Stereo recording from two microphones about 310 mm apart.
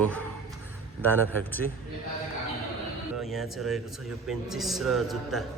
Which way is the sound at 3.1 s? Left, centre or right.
Centre.